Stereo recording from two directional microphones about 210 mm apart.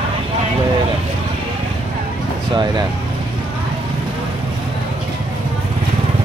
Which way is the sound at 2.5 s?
20° right (ahead or behind).